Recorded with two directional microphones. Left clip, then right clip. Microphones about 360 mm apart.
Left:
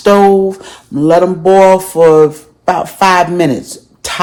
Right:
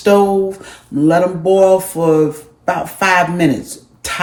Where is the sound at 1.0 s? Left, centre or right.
Left.